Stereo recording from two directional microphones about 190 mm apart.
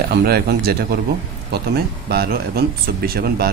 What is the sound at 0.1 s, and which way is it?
Speech, 60° right (ahead or behind).